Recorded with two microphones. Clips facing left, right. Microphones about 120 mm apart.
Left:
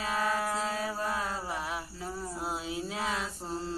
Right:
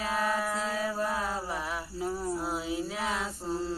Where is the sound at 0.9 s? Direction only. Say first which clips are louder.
Right 2 dB; 15° right (ahead or behind).